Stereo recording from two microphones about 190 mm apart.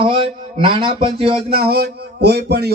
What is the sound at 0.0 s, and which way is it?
A man's voice, 30° right (ahead or behind).